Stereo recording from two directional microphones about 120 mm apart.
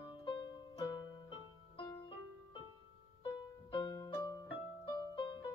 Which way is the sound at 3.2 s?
45° left (ahead or behind).